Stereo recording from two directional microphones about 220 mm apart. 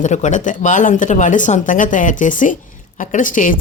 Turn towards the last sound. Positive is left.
turn(degrees=35)  # may be behind; listen again after turning